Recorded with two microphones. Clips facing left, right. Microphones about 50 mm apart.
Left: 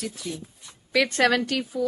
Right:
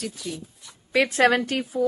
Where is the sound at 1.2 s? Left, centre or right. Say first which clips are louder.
Right 3 dB; right.